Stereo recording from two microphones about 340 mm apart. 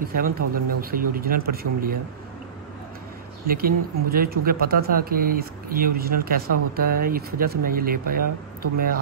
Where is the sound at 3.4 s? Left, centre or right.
Right.